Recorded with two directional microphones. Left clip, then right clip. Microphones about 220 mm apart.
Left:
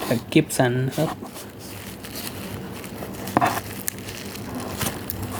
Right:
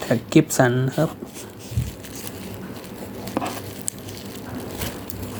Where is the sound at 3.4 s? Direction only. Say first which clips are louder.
Left 7 dB; 20° left (ahead or behind).